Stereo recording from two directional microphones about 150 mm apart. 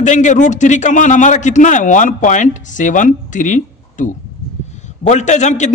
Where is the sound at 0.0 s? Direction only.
55° left (ahead or behind).